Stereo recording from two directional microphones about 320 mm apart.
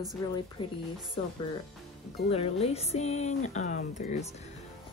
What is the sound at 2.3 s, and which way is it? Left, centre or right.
Speech, centre.